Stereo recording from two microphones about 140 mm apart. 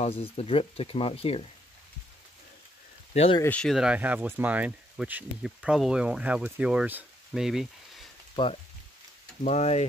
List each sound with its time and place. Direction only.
0.0 s speech: 45° left (ahead or behind)
3.1 s speech: 45° left (ahead or behind)
3.4 s speech: 10° left (ahead or behind)
3.7 s speech: 10° right (ahead or behind)
8.4 s speech: 35° left (ahead or behind)
9.4 s speech: 55° left (ahead or behind)